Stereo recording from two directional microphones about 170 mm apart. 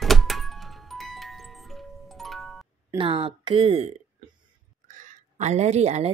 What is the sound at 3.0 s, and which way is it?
Speech, 30° right (ahead or behind).